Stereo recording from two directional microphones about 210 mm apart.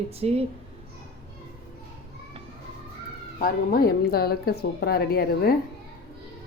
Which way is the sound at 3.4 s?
45° left (ahead or behind).